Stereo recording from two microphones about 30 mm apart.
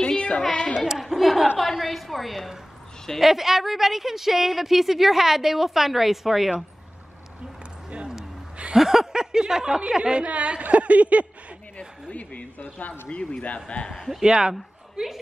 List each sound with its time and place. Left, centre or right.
0.0 s a sound: left
0.7 s a woman's voice: centre
1.0 s a sound: centre
1.6 s a woman's voice: centre
8.7 s a sound: centre
9.1 s speech: right
10.2 s speech: right
12.1 s a woman's voice: left
13.1 s a man's voice: left
14.2 s speech: right